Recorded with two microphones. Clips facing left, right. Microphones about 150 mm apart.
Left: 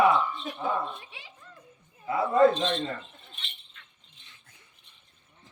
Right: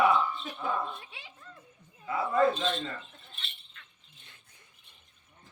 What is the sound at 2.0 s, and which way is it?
Speech, 30° left (ahead or behind).